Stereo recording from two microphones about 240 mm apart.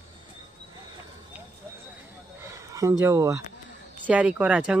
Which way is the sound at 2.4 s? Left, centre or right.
Centre.